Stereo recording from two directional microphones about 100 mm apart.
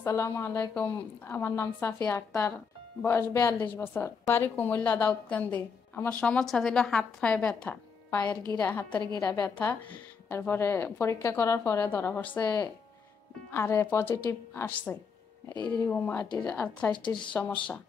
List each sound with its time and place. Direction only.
0.0 s a woman's voice: 30° left (ahead or behind)
2.0 s a woman's voice: 15° left (ahead or behind)
15.7 s a woman's voice: 15° left (ahead or behind)
16.9 s speech: 50° left (ahead or behind)
17.3 s a woman's voice: 15° left (ahead or behind)